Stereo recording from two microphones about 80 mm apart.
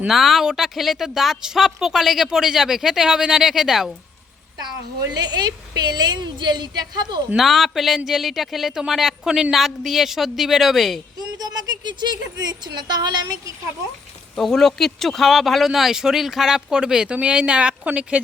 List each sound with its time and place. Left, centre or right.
0.1 s a woman's voice: centre
5.1 s a woman's voice: right
7.3 s a woman's voice: centre
11.3 s speech: right
14.3 s a woman's voice: centre